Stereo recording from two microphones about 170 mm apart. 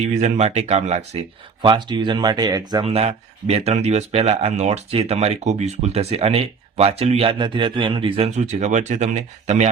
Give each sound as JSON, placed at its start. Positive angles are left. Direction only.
{"t": 0.2, "sound": "speech", "side_deg": -40}
{"t": 1.6, "sound": "speech", "side_deg": -25}